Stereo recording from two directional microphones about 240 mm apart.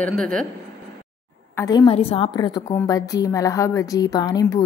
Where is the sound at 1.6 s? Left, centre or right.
Centre.